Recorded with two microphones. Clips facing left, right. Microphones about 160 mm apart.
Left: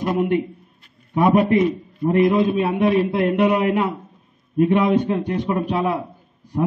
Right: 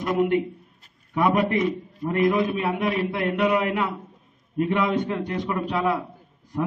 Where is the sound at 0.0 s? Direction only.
25° left (ahead or behind).